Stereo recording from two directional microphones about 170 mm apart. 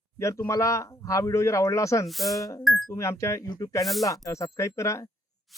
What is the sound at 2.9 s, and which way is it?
Speech, 15° left (ahead or behind).